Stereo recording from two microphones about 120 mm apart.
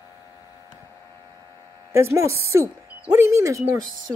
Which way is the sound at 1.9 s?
20° right (ahead or behind).